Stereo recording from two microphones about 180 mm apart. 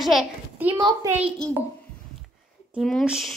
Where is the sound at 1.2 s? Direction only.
5° left (ahead or behind).